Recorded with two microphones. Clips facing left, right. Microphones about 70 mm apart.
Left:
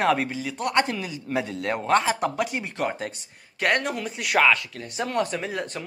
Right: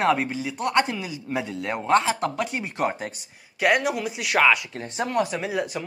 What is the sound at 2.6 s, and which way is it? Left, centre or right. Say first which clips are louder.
Speech: right 2 dB; centre.